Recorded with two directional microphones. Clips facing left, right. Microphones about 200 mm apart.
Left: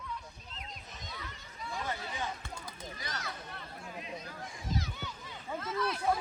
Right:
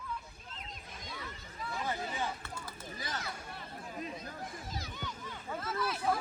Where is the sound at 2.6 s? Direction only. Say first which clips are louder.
Left 1 dB; 5° right (ahead or behind).